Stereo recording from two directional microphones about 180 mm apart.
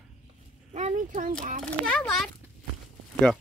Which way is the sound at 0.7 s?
40° right (ahead or behind).